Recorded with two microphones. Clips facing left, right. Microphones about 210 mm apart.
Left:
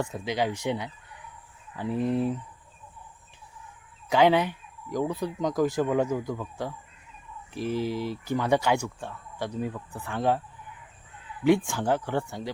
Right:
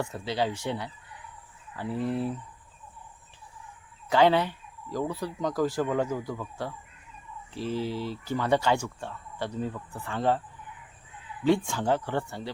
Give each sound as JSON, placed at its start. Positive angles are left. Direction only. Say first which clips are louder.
{"t": 0.0, "sound": "speech", "louder": "left 1 dB", "side_deg": 15}
{"t": 4.1, "sound": "speech", "louder": "left 1 dB", "side_deg": 15}
{"t": 11.4, "sound": "speech", "louder": "left 2 dB", "side_deg": 10}